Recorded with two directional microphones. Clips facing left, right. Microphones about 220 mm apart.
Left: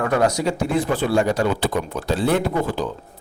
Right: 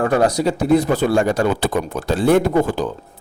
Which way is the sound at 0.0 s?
30° right (ahead or behind).